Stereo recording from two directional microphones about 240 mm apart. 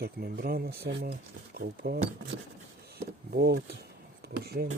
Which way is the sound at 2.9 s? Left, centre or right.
Right.